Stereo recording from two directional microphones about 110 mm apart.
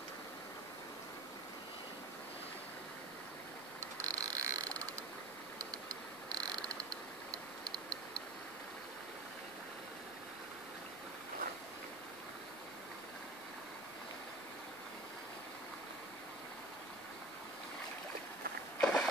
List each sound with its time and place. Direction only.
4.0 s frog: 30° right (ahead or behind)
5.6 s a sound: 35° right (ahead or behind)
18.8 s vehicle: 10° left (ahead or behind)